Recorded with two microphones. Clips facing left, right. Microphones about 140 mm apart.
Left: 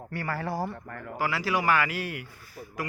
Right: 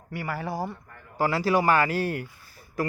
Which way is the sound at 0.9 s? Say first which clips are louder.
Left 10 dB; 85° left.